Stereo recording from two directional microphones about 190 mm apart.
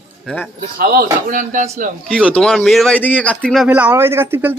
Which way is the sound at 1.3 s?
45° right (ahead or behind).